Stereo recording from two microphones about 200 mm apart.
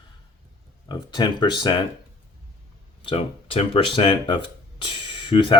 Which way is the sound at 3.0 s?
30° left (ahead or behind).